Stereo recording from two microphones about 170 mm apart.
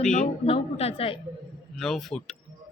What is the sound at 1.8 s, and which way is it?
Speech, 5° left (ahead or behind).